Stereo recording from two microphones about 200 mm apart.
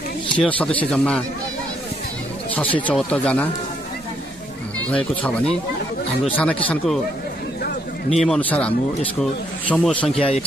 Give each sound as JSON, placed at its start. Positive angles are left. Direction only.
{"t": 0.4, "sound": "speech", "side_deg": 5}
{"t": 2.5, "sound": "speech", "side_deg": 5}
{"t": 4.9, "sound": "speech", "side_deg": 5}
{"t": 8.2, "sound": "speech", "side_deg": 5}
{"t": 10.0, "sound": "speech", "side_deg": 30}